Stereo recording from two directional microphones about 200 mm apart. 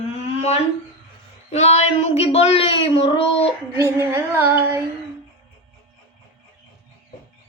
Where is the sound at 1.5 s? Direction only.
30° left (ahead or behind).